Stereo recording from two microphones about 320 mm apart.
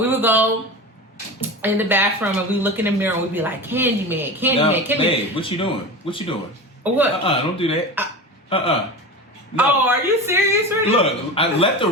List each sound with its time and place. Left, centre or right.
0.0 s speech: centre
4.9 s a man's voice: centre
6.8 s a man's voice: centre
7.3 s a man's voice: centre
8.0 s a man's voice: centre
8.4 s speech: centre
9.6 s speech: centre
10.9 s a man's voice: centre